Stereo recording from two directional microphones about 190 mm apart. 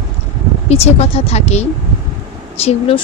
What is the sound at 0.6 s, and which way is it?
Speech, 35° left (ahead or behind).